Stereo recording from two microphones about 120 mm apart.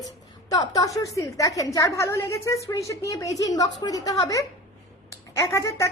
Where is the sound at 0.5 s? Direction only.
35° left (ahead or behind).